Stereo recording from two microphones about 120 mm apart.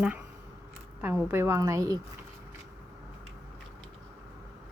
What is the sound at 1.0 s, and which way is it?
Speech, 20° right (ahead or behind).